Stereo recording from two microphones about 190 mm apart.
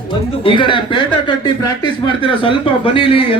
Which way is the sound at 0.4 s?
25° left (ahead or behind).